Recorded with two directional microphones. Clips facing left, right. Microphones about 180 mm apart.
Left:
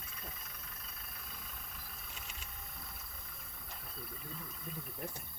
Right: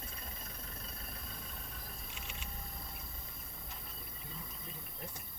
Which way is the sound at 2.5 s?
30° right (ahead or behind).